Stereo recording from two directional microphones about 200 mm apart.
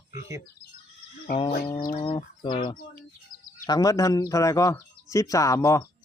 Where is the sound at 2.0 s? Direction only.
25° left (ahead or behind).